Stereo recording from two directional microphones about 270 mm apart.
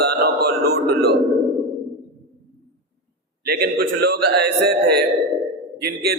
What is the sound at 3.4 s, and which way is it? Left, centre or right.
A man's voice, right.